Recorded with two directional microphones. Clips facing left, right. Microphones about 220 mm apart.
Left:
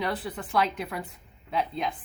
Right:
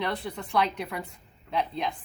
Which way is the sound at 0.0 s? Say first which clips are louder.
Even; 5° left (ahead or behind).